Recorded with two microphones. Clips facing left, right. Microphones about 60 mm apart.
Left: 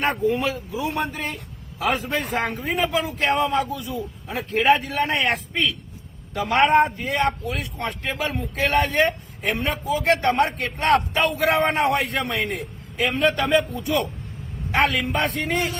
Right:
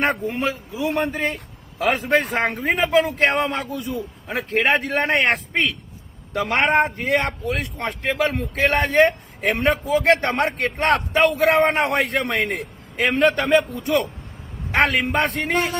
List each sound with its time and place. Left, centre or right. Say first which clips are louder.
0.3 s a man's voice: left 2 dB; right